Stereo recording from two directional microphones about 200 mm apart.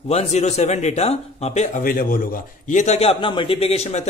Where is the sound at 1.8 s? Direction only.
45° left (ahead or behind).